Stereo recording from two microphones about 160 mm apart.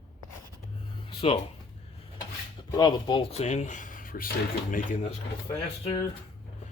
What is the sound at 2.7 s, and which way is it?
Speech, 25° left (ahead or behind).